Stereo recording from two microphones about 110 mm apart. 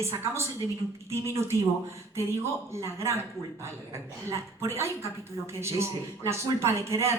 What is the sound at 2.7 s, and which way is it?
Speech, 25° right (ahead or behind).